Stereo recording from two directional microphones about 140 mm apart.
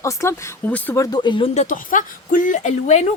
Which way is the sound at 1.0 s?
30° left (ahead or behind).